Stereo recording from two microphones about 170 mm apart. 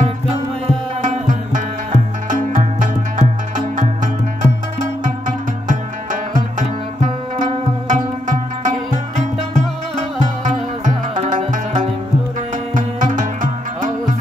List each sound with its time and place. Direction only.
1.0 s music: 50° right (ahead or behind)
7.9 s music: 45° right (ahead or behind)